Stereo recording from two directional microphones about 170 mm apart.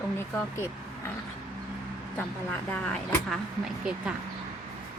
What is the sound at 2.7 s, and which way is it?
Speech, 5° left (ahead or behind).